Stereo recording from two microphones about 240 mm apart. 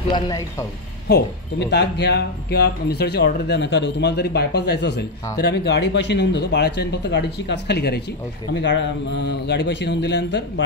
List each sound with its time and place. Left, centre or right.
0.1 s speech: centre
1.0 s speech: left